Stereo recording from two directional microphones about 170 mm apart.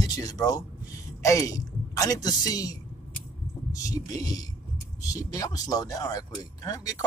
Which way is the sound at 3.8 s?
20° left (ahead or behind).